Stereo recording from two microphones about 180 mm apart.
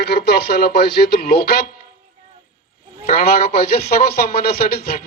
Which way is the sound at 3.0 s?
55° left (ahead or behind).